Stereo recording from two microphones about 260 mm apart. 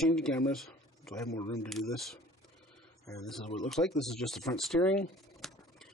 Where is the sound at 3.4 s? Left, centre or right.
Left.